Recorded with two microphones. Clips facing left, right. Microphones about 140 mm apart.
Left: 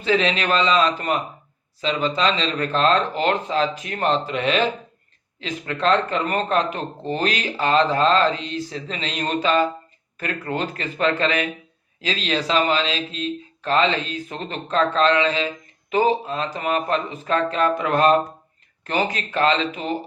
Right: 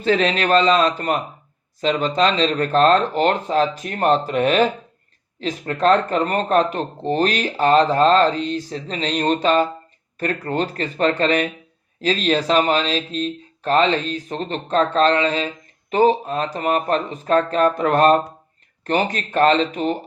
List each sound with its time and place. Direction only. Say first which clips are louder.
0.0 s speech: right 2 dB; 40° right (ahead or behind)